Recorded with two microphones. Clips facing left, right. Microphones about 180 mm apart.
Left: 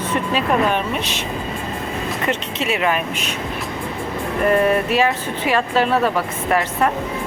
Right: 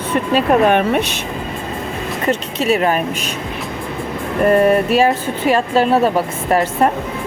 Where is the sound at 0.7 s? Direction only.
60° right (ahead or behind).